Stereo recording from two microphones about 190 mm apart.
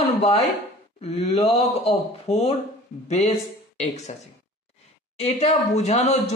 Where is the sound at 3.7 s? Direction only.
35° left (ahead or behind).